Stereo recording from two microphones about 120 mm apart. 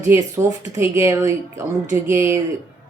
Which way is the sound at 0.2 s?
30° right (ahead or behind).